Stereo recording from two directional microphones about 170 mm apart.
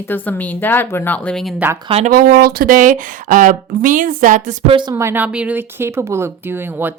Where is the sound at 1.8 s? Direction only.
35° right (ahead or behind).